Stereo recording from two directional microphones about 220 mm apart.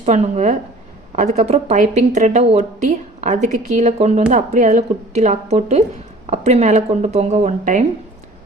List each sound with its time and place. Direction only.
0.0 s a woman's voice: 30° right (ahead or behind)